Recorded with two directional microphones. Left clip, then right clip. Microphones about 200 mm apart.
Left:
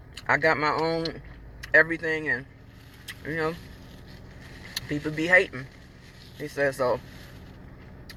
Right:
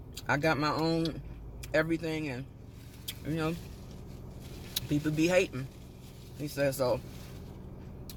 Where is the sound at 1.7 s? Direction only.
25° right (ahead or behind).